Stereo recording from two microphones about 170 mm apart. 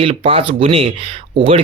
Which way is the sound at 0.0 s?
30° right (ahead or behind).